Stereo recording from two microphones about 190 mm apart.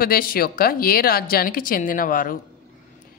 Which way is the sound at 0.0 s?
50° left (ahead or behind).